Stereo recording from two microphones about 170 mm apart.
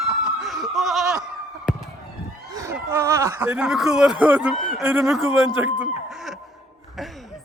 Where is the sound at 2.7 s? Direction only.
15° right (ahead or behind).